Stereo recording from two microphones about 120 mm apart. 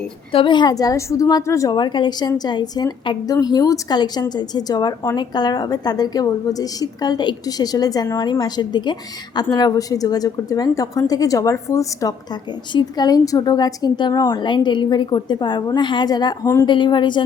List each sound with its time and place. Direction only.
0.3 s a woman's voice: 45° left (ahead or behind); by 1.7 s 25° left (ahead or behind)
1.7 s a woman's voice: 40° left (ahead or behind)
14.1 s a woman's voice: 25° left (ahead or behind)
14.3 s a woman's voice: 40° left (ahead or behind)